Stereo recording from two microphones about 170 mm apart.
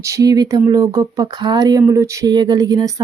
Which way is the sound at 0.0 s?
20° right (ahead or behind).